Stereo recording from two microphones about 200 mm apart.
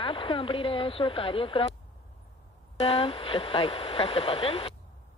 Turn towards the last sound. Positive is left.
turn(degrees=30)  # may be behind; listen again after turning